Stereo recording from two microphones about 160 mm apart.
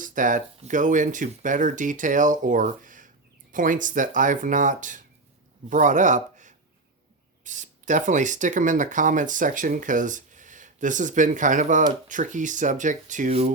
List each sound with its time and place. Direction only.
0.0 s speech: 55° right (ahead or behind)